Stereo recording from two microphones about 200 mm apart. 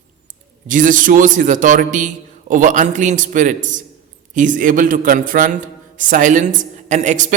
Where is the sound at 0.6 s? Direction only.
40° right (ahead or behind).